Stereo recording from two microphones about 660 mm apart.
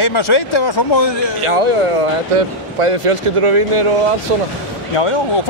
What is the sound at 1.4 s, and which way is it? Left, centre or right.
A man's voice, right.